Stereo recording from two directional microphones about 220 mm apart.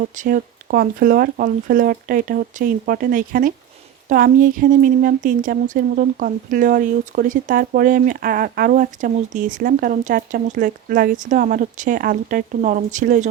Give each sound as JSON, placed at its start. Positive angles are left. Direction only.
{"t": 0.0, "sound": "speech", "side_deg": -35}